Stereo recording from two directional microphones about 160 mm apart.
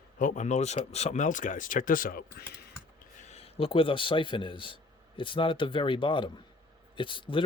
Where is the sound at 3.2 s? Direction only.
40° left (ahead or behind).